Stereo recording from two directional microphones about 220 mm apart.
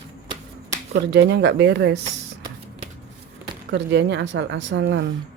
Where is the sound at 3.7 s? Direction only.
50° right (ahead or behind).